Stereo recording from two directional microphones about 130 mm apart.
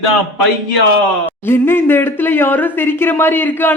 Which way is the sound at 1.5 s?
15° left (ahead or behind).